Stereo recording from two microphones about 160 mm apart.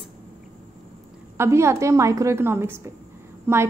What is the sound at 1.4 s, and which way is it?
A woman's voice, 15° right (ahead or behind).